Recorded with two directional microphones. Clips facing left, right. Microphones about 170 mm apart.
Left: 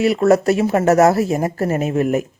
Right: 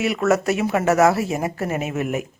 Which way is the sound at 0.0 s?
35° left (ahead or behind).